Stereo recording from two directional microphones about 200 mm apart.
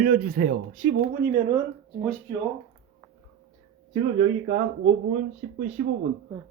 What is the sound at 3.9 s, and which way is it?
Speech, 30° right (ahead or behind).